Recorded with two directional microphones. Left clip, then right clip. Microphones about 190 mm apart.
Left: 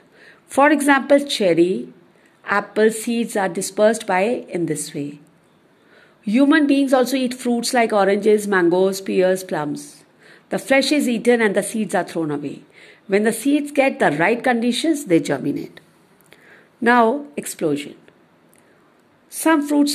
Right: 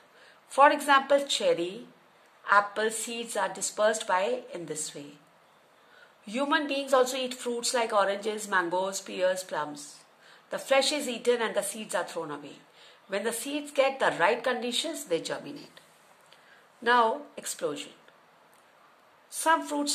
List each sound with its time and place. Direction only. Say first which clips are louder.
0.2 s a sound: left 5 dB; 35° left (ahead or behind)
0.8 s a woman's voice: left 7 dB; 35° left (ahead or behind)
6.7 s a woman's voice: left 8 dB; 35° left (ahead or behind)
16.8 s a woman's voice: left 8 dB; 40° left (ahead or behind)
19.3 s a woman's voice: left 9 dB; 30° left (ahead or behind)